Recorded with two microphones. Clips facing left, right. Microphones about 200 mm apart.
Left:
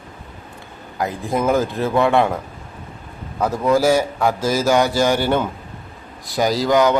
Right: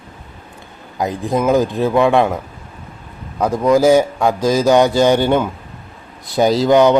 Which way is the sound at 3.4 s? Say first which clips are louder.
Right 4 dB; 15° right (ahead or behind).